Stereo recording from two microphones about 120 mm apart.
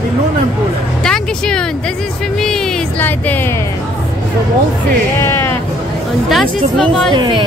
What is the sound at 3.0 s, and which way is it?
Speech, 15° left (ahead or behind).